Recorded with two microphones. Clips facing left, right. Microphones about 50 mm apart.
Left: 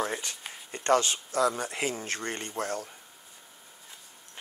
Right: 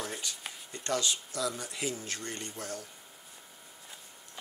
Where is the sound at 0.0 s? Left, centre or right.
Left.